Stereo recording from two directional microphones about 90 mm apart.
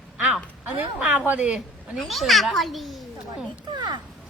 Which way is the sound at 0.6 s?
15° right (ahead or behind).